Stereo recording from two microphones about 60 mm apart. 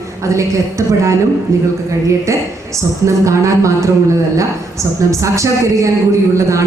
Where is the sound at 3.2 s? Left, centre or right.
Right.